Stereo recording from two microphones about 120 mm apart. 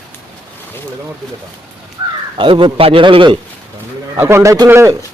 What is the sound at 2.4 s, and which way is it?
Speech, 45° right (ahead or behind).